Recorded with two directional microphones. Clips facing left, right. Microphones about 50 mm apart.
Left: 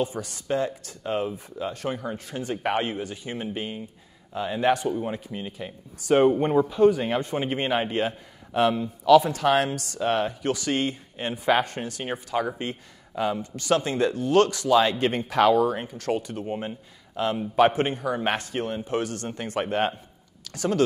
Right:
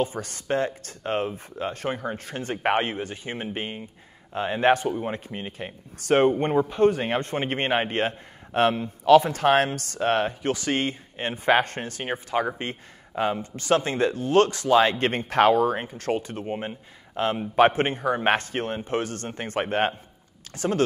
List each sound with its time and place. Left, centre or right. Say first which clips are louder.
0.0 s speech: right 1 dB; right
5.9 s speech: left 1 dB; right